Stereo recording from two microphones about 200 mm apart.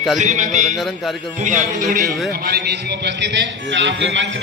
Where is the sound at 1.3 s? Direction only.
40° right (ahead or behind).